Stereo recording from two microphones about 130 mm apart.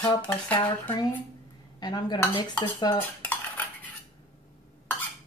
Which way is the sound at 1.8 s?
35° left (ahead or behind).